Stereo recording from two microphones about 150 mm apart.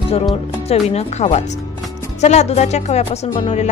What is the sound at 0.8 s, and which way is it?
Music, 45° left (ahead or behind).